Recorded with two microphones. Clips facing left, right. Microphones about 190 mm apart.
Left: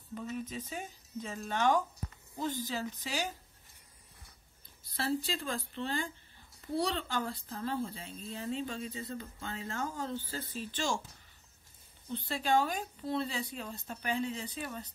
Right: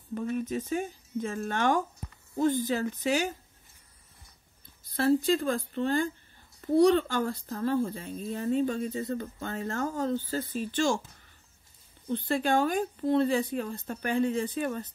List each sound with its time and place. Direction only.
0.1 s a woman's voice: 55° right (ahead or behind)
4.9 s a woman's voice: 50° right (ahead or behind)
12.1 s a woman's voice: 50° right (ahead or behind)